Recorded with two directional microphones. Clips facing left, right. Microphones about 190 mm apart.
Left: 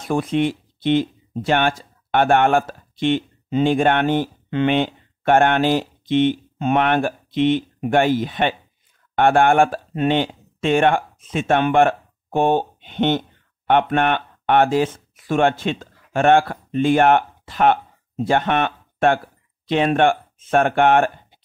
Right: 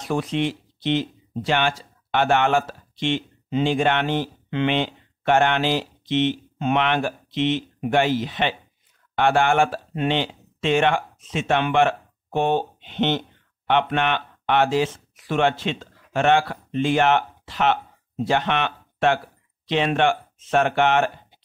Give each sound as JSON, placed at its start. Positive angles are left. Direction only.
{"t": 0.0, "sound": "speech", "side_deg": 50}